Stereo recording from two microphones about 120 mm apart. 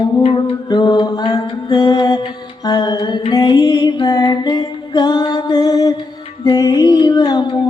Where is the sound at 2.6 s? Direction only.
35° left (ahead or behind).